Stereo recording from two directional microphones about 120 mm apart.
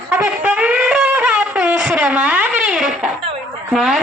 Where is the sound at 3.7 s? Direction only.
5° right (ahead or behind).